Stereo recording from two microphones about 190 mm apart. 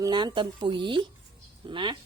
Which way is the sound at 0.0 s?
20° right (ahead or behind).